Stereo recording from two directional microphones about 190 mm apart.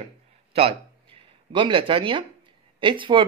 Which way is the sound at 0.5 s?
30° right (ahead or behind).